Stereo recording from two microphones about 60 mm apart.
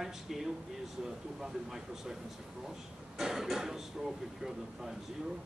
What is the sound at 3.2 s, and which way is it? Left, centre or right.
Speech, centre.